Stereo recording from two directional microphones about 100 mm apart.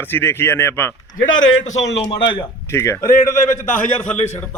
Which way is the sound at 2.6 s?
25° left (ahead or behind).